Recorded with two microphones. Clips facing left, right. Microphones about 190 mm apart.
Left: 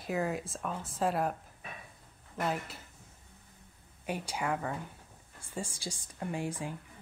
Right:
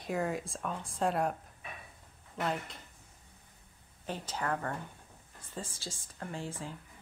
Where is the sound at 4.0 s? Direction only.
10° left (ahead or behind).